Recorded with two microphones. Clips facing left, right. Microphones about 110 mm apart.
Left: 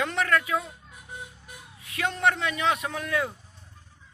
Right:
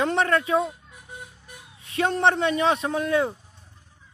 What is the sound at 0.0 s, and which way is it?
Speech, 30° right (ahead or behind).